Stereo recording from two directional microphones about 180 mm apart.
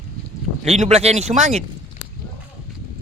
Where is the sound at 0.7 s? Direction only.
35° right (ahead or behind).